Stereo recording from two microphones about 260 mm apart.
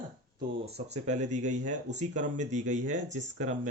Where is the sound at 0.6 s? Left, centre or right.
Right.